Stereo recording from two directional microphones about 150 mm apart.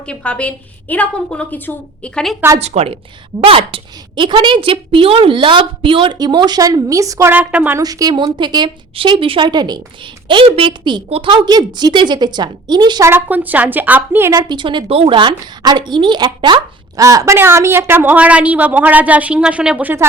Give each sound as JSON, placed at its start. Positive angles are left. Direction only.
{"t": 0.0, "sound": "a woman's voice", "side_deg": 5}
{"t": 2.6, "sound": "a woman's voice", "side_deg": -45}
{"t": 7.8, "sound": "a woman's voice", "side_deg": -25}
{"t": 13.1, "sound": "speech", "side_deg": -10}
{"t": 14.4, "sound": "a woman's voice", "side_deg": -30}